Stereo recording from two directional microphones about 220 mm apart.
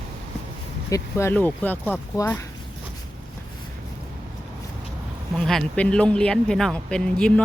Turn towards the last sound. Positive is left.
turn(degrees=5)  # may be behind; listen again after turning